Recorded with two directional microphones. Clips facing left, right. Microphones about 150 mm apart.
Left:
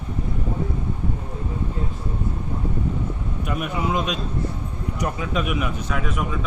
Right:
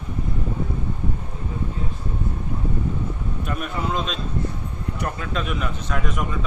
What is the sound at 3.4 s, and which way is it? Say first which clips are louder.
A man's voice: left 2 dB; 10° left (ahead or behind).